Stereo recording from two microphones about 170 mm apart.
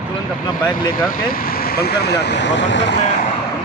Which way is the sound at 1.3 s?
60° left (ahead or behind).